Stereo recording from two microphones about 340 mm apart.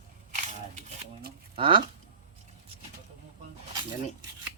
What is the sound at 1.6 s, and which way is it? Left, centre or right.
Speech, centre.